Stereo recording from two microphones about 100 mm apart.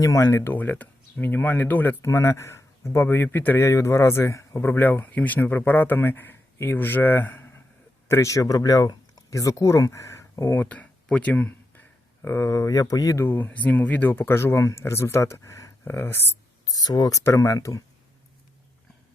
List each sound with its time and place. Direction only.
0.0 s speech: 35° left (ahead or behind)
0.3 s speech: 20° left (ahead or behind); by 13.2 s 35° left (ahead or behind)
13.2 s speech: 20° left (ahead or behind)
16.6 s speech: 40° left (ahead or behind)